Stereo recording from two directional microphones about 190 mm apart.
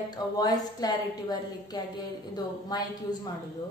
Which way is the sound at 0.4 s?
20° left (ahead or behind).